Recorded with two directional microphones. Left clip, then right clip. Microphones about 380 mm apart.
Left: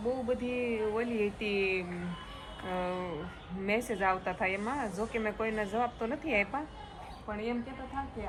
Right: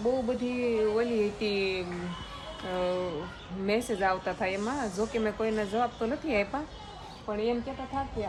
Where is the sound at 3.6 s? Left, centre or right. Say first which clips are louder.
Right 2 dB; centre.